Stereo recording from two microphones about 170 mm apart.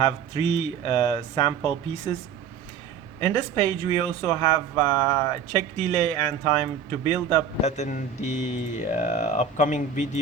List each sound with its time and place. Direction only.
0.0 s speech: 40° left (ahead or behind)
3.2 s speech: 25° left (ahead or behind)
7.6 s speech: 45° left (ahead or behind)